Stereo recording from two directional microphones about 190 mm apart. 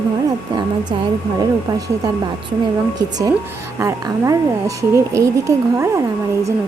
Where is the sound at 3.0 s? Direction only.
20° right (ahead or behind).